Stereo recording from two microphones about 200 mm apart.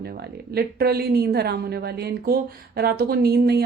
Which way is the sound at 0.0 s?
50° right (ahead or behind).